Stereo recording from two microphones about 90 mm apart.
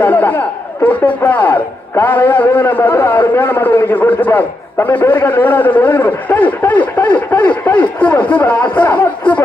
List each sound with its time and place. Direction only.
0.0 s a man's voice: 20° left (ahead or behind)